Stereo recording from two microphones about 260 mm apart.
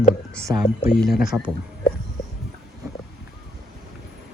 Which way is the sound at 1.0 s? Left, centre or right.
Centre.